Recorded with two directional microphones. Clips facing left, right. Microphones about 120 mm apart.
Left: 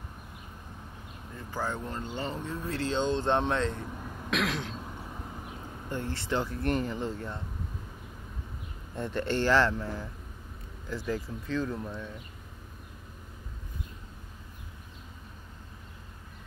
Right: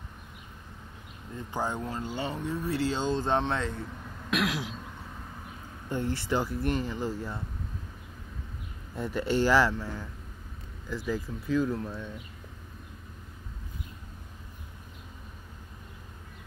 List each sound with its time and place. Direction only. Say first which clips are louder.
1.5 s speech: right 2 dB; 20° right (ahead or behind)
4.3 s throat clearing: right 1 dB; 5° right (ahead or behind)
5.9 s speech: right 3 dB; 15° right (ahead or behind)
8.9 s speech: right 2 dB; 5° right (ahead or behind)